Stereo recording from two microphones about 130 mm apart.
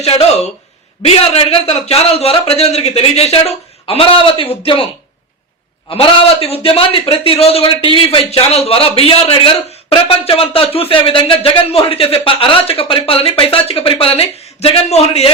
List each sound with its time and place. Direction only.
0.0 s speech: 50° left (ahead or behind)
5.9 s speech: 45° left (ahead or behind)